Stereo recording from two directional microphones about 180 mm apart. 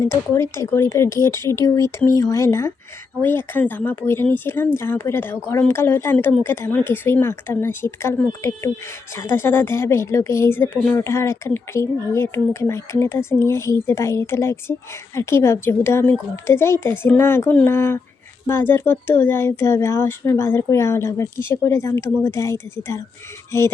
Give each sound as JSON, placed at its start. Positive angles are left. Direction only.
{"t": 0.0, "sound": "speech", "side_deg": 15}